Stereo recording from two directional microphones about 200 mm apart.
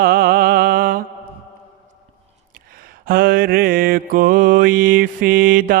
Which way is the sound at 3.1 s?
45° right (ahead or behind).